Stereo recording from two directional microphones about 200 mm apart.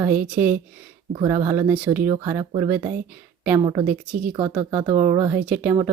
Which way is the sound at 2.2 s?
15° right (ahead or behind).